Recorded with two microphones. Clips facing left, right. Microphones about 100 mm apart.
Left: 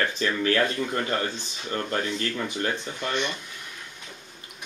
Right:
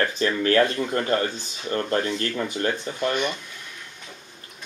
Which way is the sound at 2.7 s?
10° right (ahead or behind).